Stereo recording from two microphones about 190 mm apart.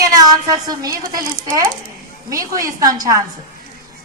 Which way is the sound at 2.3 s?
15° right (ahead or behind).